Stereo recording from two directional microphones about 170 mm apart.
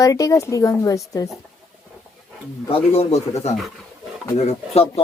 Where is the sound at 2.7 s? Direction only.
35° left (ahead or behind).